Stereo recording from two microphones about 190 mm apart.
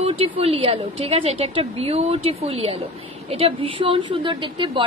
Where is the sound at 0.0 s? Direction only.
30° right (ahead or behind).